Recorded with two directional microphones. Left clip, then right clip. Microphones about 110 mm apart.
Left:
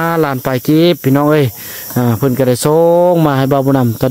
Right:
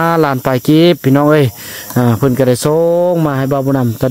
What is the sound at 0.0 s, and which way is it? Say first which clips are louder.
Speech: right 2 dB; 5° right (ahead or behind).